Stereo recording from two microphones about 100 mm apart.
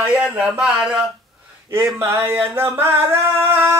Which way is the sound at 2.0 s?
25° right (ahead or behind).